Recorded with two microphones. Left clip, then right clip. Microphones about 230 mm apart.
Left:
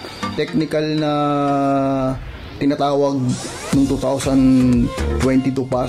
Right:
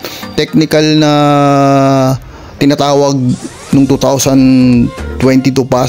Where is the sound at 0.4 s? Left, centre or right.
Right.